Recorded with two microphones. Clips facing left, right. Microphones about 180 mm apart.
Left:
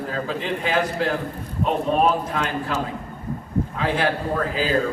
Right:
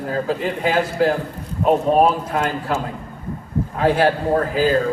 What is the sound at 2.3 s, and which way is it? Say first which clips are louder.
Speech: right 4 dB; 50° right (ahead or behind).